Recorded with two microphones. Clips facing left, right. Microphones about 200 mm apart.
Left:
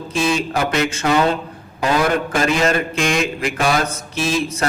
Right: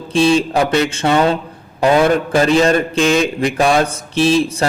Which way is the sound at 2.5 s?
30° right (ahead or behind).